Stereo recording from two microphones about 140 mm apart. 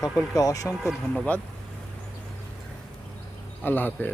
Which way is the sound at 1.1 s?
10° left (ahead or behind).